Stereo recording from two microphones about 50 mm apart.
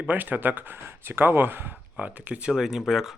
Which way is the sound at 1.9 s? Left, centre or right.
Right.